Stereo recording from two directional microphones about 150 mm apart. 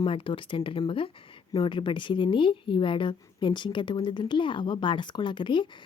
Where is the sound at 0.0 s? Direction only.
35° left (ahead or behind).